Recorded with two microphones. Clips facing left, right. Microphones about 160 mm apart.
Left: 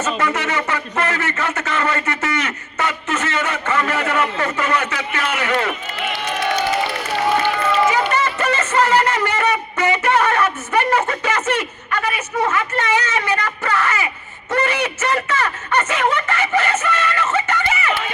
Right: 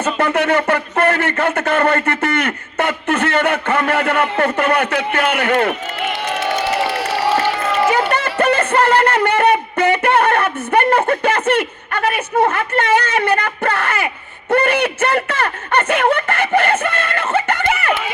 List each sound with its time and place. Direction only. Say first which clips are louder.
0.0 s speech: right 4 dB; 55° right (ahead or behind)
6.7 s crowd: right 3 dB; 75° right (ahead or behind)
7.9 s a sound: right 2 dB; 55° right (ahead or behind)
14.5 s speech: right 5 dB; 55° right (ahead or behind)